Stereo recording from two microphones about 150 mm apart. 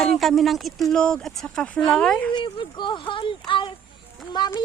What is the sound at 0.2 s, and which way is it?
Speech, centre (ahead or behind).